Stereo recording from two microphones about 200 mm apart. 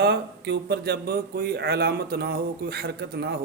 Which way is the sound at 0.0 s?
60° right (ahead or behind).